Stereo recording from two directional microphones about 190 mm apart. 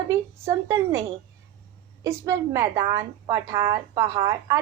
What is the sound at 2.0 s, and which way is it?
A woman's voice, 15° right (ahead or behind).